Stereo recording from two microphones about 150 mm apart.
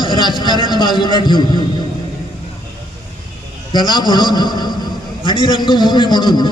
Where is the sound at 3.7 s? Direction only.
30° left (ahead or behind).